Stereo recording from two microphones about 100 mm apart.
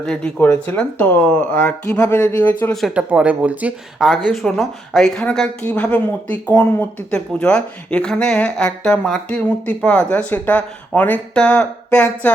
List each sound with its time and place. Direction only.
0.0 s speech: 10° left (ahead or behind)
0.4 s speech: 20° left (ahead or behind)
2.8 s speech: 10° right (ahead or behind)
4.0 s speech: centre (ahead or behind)